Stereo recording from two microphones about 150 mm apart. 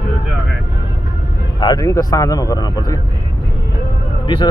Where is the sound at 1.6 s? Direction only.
25° left (ahead or behind).